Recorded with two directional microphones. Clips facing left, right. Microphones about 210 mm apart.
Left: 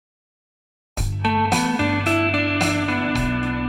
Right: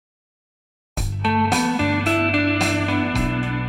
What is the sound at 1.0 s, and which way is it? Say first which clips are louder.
Music: right 1 dB; centre (ahead or behind).